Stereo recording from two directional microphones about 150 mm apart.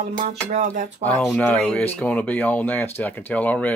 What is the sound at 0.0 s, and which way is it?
Speech, 50° right (ahead or behind).